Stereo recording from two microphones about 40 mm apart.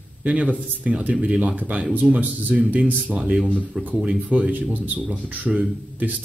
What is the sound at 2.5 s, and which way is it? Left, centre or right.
Speech, right.